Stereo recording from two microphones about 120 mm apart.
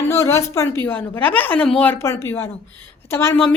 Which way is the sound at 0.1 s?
25° left (ahead or behind).